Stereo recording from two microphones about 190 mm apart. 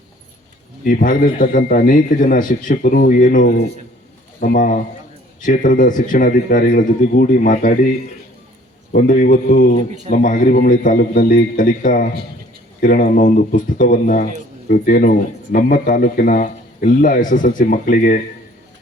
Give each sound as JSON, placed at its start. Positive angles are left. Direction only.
{"t": 0.9, "sound": "speech", "side_deg": 45}